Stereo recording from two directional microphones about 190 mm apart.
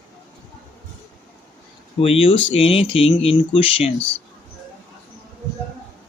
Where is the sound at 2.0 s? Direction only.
30° left (ahead or behind).